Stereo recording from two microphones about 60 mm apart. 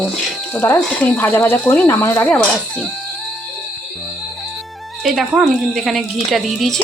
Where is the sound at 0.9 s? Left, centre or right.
Left.